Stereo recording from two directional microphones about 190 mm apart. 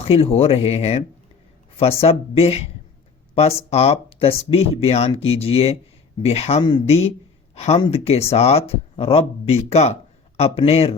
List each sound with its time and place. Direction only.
0.0 s speech: 30° left (ahead or behind)